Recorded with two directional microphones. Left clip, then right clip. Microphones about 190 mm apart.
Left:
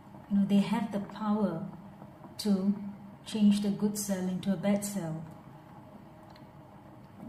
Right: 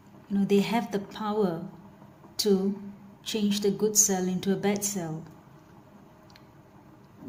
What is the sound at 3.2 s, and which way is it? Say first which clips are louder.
A woman's voice: right 3 dB; 55° right (ahead or behind).